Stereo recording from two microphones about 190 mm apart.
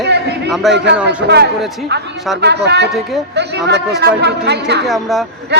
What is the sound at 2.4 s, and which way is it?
Speech, 60° right (ahead or behind).